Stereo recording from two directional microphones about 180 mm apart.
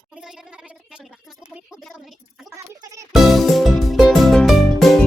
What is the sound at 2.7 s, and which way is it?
Music, 20° right (ahead or behind).